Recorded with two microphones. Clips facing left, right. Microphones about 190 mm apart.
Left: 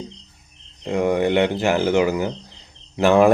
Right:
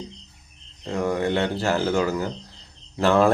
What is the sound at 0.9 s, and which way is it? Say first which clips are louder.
Speech: left 5 dB; 20° left (ahead or behind).